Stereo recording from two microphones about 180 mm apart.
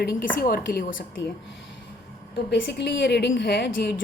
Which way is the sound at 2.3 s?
70° left (ahead or behind).